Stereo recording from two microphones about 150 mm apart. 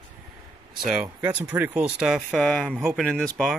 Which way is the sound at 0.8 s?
5° right (ahead or behind).